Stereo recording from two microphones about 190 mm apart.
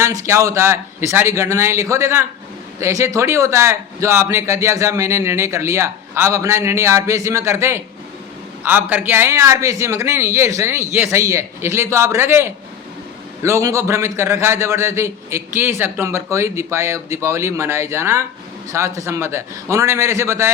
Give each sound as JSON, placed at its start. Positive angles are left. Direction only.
{"t": 0.0, "sound": "a man's voice", "side_deg": -15}